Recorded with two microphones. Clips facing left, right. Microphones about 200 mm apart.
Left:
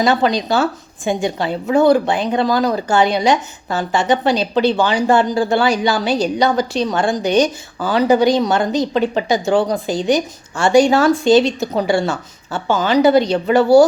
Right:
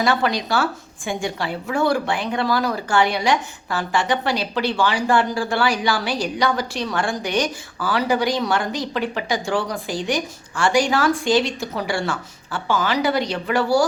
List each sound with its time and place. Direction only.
0.0 s a woman's voice: 20° left (ahead or behind)